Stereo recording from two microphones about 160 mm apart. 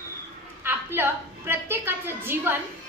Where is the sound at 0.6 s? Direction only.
15° right (ahead or behind).